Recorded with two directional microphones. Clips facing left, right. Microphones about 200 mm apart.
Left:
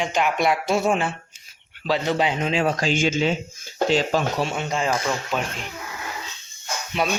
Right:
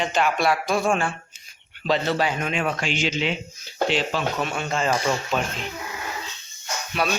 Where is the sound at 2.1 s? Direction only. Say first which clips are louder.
Left 2 dB; 20° left (ahead or behind); by 4.4 s 40° left (ahead or behind).